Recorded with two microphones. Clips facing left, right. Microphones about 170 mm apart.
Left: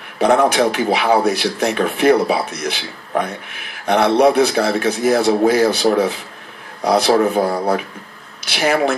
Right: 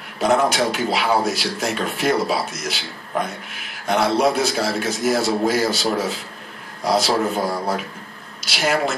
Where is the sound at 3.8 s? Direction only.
60° left (ahead or behind).